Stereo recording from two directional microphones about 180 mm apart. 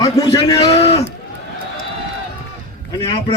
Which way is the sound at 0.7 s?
35° left (ahead or behind).